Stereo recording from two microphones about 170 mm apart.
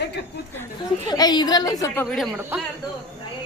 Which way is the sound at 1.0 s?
25° left (ahead or behind).